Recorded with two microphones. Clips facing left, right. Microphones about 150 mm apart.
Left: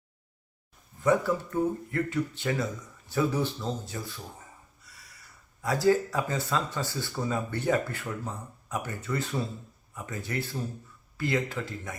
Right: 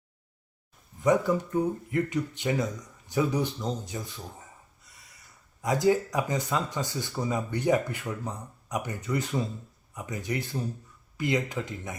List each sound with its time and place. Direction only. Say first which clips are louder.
0.9 s speech: right 1 dB; 15° right (ahead or behind)
4.8 s a sound: left 2 dB; 20° right (ahead or behind)
5.6 s speech: even; 15° right (ahead or behind)